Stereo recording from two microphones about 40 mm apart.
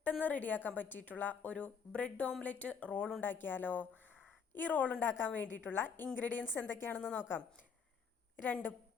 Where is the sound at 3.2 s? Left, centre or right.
Left.